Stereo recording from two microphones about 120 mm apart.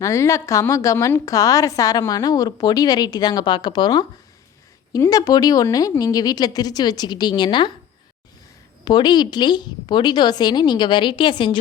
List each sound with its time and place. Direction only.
0.0 s a woman's voice: 25° left (ahead or behind)
8.8 s a woman's voice: 35° left (ahead or behind)